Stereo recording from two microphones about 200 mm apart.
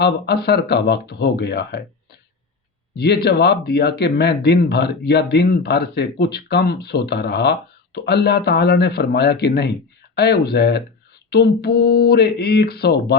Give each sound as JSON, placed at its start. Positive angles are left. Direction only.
{"t": 0.0, "sound": "speech", "side_deg": 55}
{"t": 2.9, "sound": "speech", "side_deg": 55}